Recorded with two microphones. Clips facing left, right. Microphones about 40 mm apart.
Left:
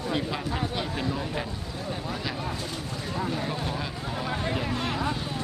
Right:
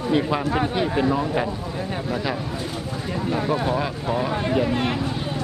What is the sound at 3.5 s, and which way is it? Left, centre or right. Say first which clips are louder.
Speech: right 9 dB; centre.